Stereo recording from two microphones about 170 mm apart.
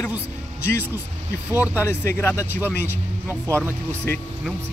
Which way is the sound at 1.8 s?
15° left (ahead or behind).